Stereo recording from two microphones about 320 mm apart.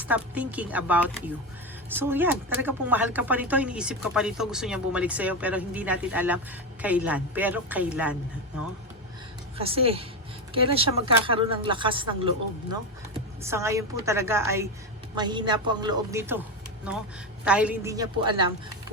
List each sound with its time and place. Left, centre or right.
0.0 s a woman's voice: centre
9.6 s speech: centre
13.4 s speech: centre
17.4 s speech: centre